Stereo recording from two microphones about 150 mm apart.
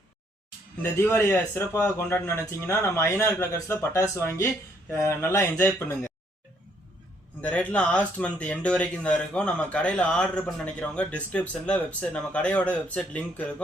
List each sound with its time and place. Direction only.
0.8 s speech: 15° left (ahead or behind)
7.4 s speech: 10° left (ahead or behind)